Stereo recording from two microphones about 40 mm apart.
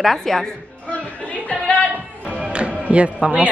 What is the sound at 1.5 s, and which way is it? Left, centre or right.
Music, left.